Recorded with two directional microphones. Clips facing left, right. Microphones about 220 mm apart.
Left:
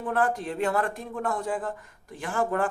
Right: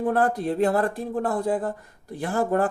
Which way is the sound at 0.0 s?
35° right (ahead or behind).